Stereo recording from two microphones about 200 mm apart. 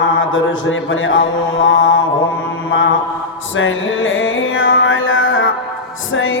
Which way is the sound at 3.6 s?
75° left (ahead or behind).